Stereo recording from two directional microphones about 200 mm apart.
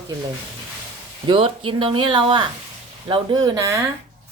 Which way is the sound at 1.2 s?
25° right (ahead or behind).